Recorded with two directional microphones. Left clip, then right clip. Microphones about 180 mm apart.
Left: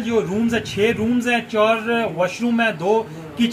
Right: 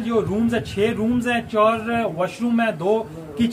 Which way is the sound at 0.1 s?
30° right (ahead or behind).